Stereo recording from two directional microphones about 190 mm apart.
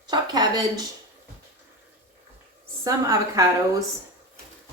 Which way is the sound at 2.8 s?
15° right (ahead or behind).